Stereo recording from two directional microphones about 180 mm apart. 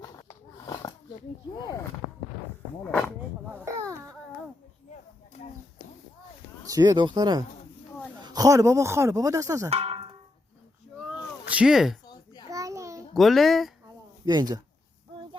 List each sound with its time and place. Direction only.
0.6 s roaring cats: 20° left (ahead or behind)
1.5 s speech: 20° left (ahead or behind)
3.5 s baby cry: 15° right (ahead or behind)
6.7 s speech: 20° right (ahead or behind)
9.6 s a sound: 35° right (ahead or behind)
11.4 s speech: 5° right (ahead or behind)
12.0 s a sound: 20° left (ahead or behind)
12.5 s a sound: 20° right (ahead or behind)
13.1 s speech: centre (ahead or behind)
14.3 s speech: 20° right (ahead or behind)